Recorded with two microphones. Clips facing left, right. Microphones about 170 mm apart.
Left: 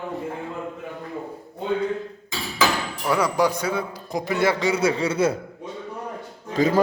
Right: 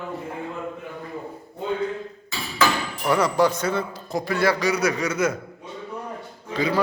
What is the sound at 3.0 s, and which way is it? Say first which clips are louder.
A man's voice: right 1 dB; 10° left (ahead or behind).